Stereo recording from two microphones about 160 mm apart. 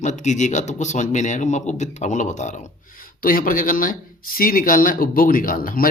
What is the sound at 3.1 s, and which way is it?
Speech, 60° left (ahead or behind).